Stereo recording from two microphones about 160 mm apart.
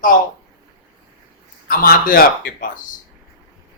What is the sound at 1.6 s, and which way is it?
Speech, 60° left (ahead or behind).